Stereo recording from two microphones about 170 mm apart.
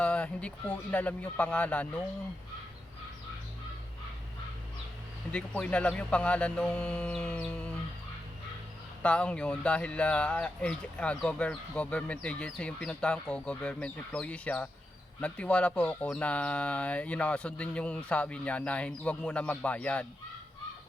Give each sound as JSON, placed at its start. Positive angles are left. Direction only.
{"t": 0.0, "sound": "speech", "side_deg": 5}
{"t": 5.3, "sound": "speech", "side_deg": 5}
{"t": 9.0, "sound": "speech", "side_deg": 5}